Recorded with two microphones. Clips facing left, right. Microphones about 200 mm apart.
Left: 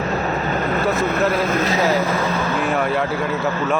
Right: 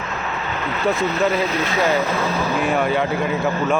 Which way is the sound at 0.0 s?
40° left (ahead or behind).